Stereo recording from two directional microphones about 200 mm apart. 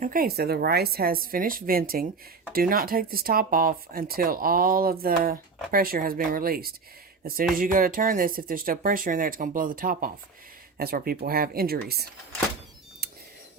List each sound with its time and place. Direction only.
0.0 s speech: 45° right (ahead or behind)